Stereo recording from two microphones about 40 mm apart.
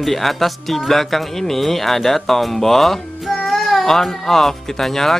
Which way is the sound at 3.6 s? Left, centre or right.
Centre.